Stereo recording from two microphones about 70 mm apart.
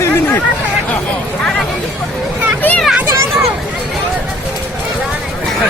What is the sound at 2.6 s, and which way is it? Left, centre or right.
Children playing, left.